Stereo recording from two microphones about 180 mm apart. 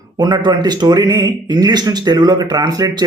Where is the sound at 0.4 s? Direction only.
25° right (ahead or behind).